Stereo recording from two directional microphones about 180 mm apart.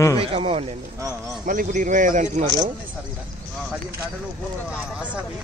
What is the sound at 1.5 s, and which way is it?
Speech, 45° right (ahead or behind).